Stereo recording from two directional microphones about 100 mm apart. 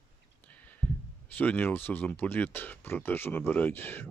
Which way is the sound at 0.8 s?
25° left (ahead or behind).